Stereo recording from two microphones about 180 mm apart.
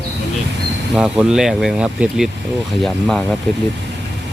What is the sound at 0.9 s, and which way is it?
Speech, 5° right (ahead or behind).